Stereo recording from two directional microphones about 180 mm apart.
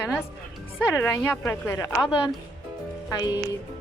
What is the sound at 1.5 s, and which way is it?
Speech, 15° left (ahead or behind).